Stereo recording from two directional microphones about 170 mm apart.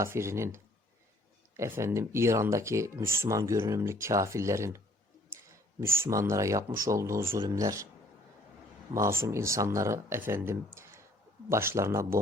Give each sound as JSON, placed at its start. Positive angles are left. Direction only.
{"t": 0.0, "sound": "speech", "side_deg": -15}
{"t": 5.8, "sound": "speech", "side_deg": -15}
{"t": 9.0, "sound": "speech", "side_deg": -15}